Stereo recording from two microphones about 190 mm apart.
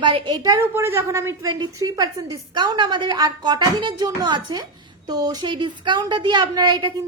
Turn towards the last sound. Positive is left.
turn(degrees=-25)  # may be behind; listen again after turning